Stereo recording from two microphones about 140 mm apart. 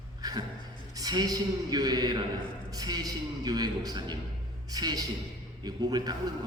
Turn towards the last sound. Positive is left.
turn(degrees=-30)  # may be behind; listen again after turning